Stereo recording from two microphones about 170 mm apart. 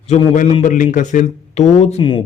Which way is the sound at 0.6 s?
50° left (ahead or behind).